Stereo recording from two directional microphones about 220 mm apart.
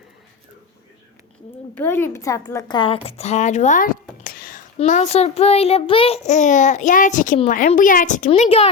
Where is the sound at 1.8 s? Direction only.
10° left (ahead or behind).